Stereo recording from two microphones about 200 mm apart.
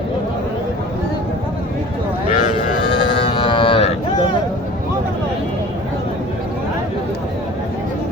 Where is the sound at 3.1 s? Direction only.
25° left (ahead or behind).